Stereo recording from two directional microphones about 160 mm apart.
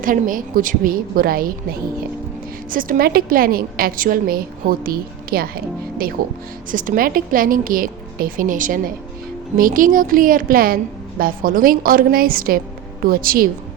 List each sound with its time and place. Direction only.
0.0 s a woman's voice: 60° right (ahead or behind)
6.7 s a woman's voice: 55° right (ahead or behind)